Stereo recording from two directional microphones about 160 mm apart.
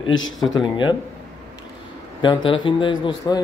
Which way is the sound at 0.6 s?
30° left (ahead or behind).